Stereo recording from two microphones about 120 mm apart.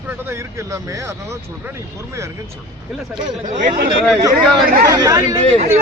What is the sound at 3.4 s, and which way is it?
Speech, 90° right.